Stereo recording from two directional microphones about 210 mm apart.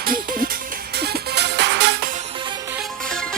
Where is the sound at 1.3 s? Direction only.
55° right (ahead or behind).